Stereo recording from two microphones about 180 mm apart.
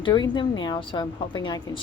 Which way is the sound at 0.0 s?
25° left (ahead or behind).